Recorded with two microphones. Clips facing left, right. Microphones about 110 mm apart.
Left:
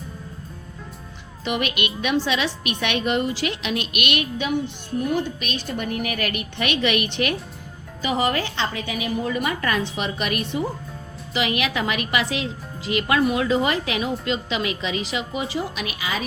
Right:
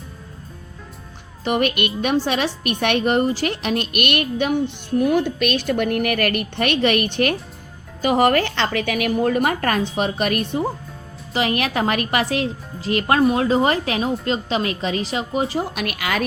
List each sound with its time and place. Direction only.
1.5 s a woman's voice: 45° right (ahead or behind)
4.9 s a woman's voice: 70° right (ahead or behind)